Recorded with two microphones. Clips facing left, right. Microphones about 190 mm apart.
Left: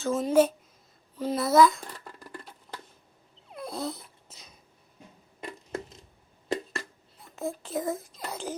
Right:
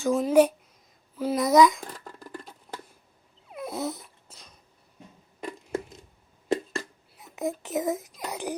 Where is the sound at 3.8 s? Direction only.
20° right (ahead or behind).